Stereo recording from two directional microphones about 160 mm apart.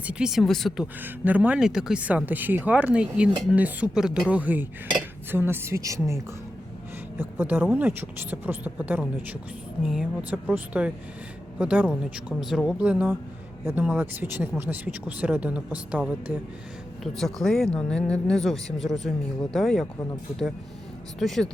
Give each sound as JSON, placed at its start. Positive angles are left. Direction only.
{"t": 0.0, "sound": "speech", "side_deg": -5}
{"t": 1.0, "sound": "speech", "side_deg": -10}
{"t": 21.2, "sound": "speech", "side_deg": 0}